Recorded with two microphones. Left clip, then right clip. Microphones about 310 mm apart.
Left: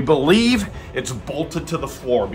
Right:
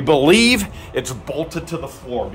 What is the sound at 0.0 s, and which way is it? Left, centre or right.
Speech, right.